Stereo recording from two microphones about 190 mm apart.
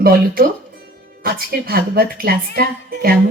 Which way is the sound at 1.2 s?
50° right (ahead or behind).